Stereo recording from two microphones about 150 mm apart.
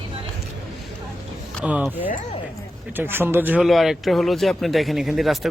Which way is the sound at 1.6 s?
10° right (ahead or behind).